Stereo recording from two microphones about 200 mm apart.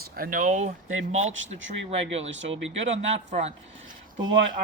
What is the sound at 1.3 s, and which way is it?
Speech, 70° right (ahead or behind).